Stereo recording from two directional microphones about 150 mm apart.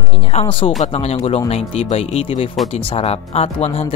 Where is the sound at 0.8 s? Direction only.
45° left (ahead or behind).